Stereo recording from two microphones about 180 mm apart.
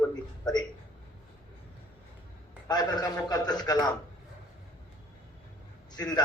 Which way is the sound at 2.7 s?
25° left (ahead or behind).